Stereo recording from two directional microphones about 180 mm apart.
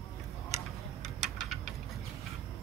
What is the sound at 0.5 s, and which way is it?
Tick-tock, 15° right (ahead or behind).